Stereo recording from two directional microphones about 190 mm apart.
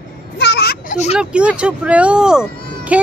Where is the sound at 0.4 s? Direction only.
60° left (ahead or behind).